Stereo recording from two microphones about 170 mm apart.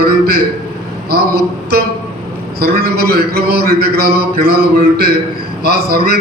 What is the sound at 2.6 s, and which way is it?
A man's voice, 65° right (ahead or behind).